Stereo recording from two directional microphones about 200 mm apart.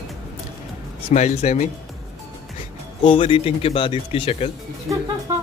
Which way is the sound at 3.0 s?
25° left (ahead or behind).